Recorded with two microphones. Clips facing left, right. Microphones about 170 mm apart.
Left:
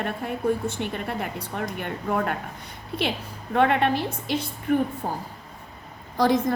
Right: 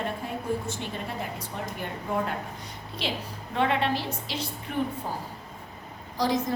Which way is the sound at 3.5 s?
55° left (ahead or behind).